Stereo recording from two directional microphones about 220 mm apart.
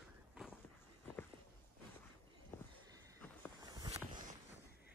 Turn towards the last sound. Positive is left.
turn(degrees=-15)  # may be behind; listen again after turning